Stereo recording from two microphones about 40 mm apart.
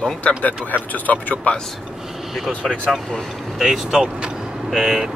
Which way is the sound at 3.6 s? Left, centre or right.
Centre.